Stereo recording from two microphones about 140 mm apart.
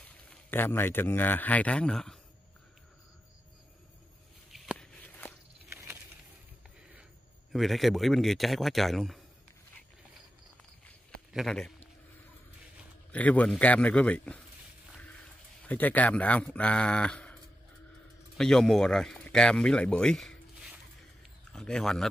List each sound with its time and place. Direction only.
0.0 s a man's voice: 15° left (ahead or behind)
4.7 s walk: 10° left (ahead or behind)
5.7 s a sound: 20° right (ahead or behind)
7.5 s a man's voice: centre (ahead or behind)
11.3 s a man's voice: 5° left (ahead or behind)
13.1 s speech: 10° left (ahead or behind)
15.6 s speech: 10° left (ahead or behind)
18.4 s speech: 5° left (ahead or behind)